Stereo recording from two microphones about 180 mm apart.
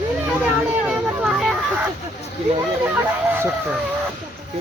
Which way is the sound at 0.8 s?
5° right (ahead or behind).